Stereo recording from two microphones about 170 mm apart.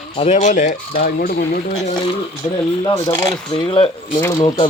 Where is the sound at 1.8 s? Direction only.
30° left (ahead or behind).